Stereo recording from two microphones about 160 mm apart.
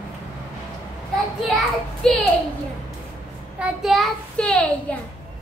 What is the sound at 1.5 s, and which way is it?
Child singing, centre (ahead or behind).